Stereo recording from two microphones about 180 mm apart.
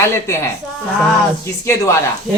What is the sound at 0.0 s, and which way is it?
Speech, 15° left (ahead or behind).